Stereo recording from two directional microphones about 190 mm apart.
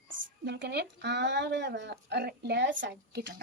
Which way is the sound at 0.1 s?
75° right (ahead or behind).